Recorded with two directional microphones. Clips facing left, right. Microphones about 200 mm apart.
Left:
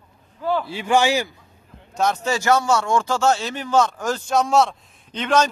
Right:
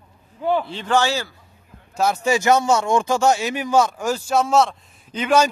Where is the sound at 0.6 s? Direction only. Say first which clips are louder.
Left 1 dB; 10° left (ahead or behind).